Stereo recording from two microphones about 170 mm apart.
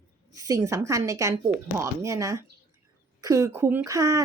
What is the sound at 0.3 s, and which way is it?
Speech, 20° right (ahead or behind).